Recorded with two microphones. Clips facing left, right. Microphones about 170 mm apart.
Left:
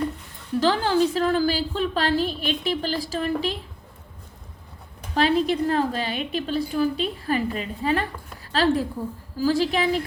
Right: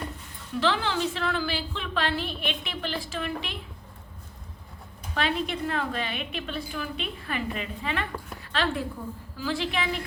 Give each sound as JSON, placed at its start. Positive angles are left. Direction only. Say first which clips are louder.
{"t": 0.6, "sound": "a woman's voice", "louder": "left 6 dB", "side_deg": 40}
{"t": 5.1, "sound": "a woman's voice", "louder": "left 8 dB", "side_deg": 35}